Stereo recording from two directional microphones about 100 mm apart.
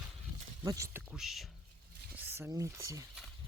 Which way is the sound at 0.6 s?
35° right (ahead or behind).